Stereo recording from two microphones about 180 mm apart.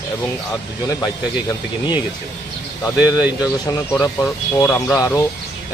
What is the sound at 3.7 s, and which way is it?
Speech, 20° left (ahead or behind).